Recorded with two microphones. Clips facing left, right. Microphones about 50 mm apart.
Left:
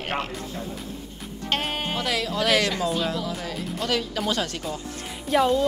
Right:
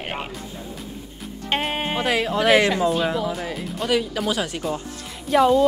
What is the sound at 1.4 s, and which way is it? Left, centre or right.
Speech, centre.